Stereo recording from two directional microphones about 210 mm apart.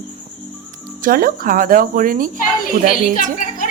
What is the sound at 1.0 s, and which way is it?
Speech, 40° right (ahead or behind).